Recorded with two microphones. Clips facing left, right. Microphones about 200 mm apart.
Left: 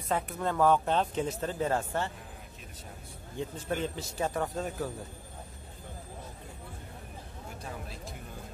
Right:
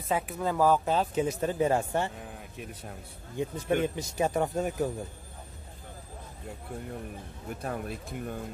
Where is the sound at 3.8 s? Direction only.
15° right (ahead or behind).